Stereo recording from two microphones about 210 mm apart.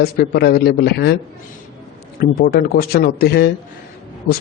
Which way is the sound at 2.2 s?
45° left (ahead or behind).